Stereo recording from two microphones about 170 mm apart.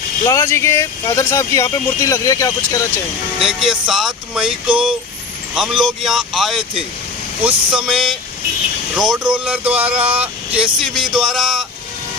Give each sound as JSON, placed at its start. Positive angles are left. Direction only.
{"t": 0.3, "sound": "speech", "side_deg": 15}
{"t": 3.4, "sound": "speech", "side_deg": -5}
{"t": 7.9, "sound": "speech", "side_deg": 0}